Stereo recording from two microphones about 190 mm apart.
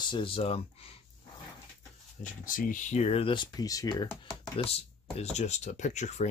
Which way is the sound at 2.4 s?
45° left (ahead or behind).